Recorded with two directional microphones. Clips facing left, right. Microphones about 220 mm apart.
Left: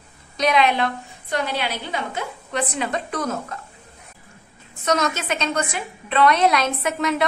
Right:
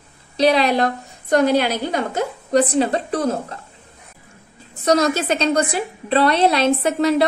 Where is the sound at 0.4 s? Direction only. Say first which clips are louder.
Right 4 dB; 35° right (ahead or behind).